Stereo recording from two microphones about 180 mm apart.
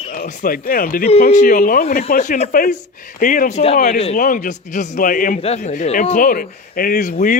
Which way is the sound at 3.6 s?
35° left (ahead or behind).